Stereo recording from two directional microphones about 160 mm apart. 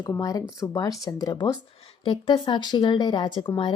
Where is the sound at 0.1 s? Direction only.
20° left (ahead or behind).